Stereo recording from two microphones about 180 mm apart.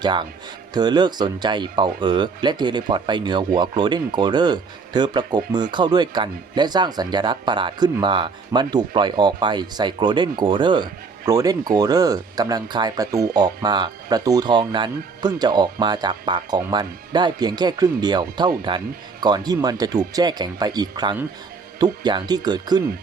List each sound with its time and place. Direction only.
0.0 s speech: 25° right (ahead or behind)